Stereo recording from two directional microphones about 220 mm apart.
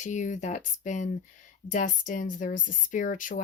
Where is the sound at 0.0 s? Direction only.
35° left (ahead or behind).